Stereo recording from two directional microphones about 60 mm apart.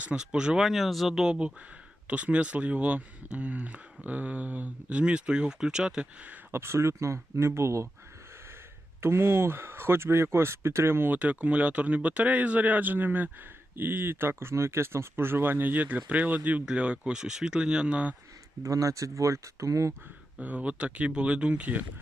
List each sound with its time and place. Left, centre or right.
0.0 s speech: centre
0.7 s speech: centre
6.5 s speech: right
9.0 s speech: right
11.1 s speech: right
18.6 s speech: right
20.4 s speech: right